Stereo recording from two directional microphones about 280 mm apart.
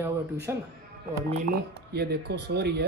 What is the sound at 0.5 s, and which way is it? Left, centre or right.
Speech, centre.